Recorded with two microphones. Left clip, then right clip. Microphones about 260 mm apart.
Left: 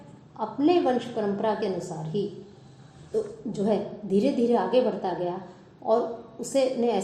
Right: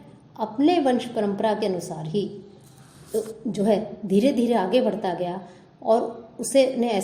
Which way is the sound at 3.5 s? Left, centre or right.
Right.